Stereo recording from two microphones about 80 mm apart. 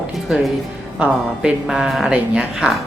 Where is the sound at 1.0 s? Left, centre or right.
Centre.